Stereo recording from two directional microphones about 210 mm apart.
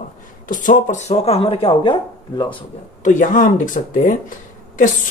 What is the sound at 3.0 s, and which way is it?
Speech, 40° left (ahead or behind).